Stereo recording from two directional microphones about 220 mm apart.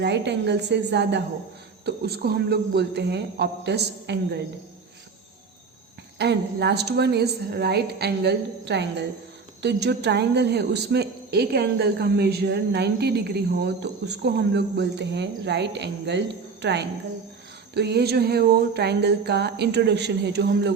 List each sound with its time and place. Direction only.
0.0 s a woman's voice: 50° right (ahead or behind)
6.1 s a woman's voice: 50° right (ahead or behind)